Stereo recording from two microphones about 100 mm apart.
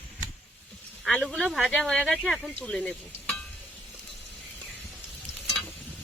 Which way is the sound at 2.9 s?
10° left (ahead or behind).